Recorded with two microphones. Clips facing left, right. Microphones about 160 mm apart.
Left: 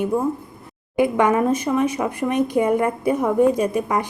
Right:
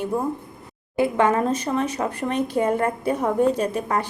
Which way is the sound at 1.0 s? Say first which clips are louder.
Left 2 dB; 15° left (ahead or behind).